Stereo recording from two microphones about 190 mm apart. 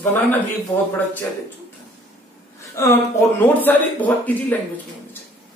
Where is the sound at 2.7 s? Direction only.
15° left (ahead or behind).